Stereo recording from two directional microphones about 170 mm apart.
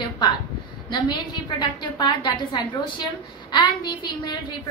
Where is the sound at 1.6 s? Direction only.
25° left (ahead or behind).